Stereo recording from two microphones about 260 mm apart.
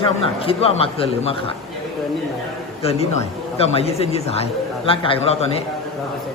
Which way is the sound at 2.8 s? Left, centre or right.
Left.